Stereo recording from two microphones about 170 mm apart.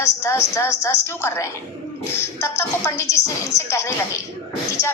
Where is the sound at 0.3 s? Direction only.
15° left (ahead or behind).